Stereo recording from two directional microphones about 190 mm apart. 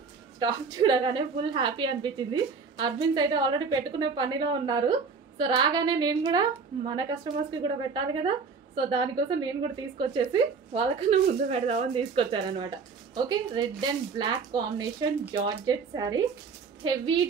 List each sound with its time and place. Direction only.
0.4 s a woman's voice: 20° right (ahead or behind)